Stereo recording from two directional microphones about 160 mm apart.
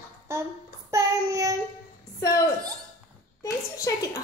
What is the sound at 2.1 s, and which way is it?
Speech, 20° left (ahead or behind).